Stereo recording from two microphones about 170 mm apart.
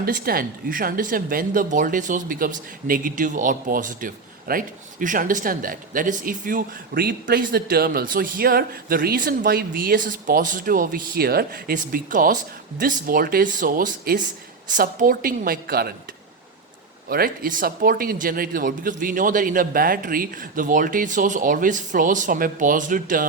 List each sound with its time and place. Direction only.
0.0 s a woman's voice: 60° right (ahead or behind)
17.1 s speech: 60° right (ahead or behind)